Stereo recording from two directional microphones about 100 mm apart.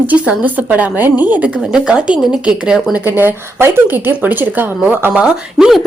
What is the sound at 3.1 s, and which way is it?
A woman's voice, 20° right (ahead or behind).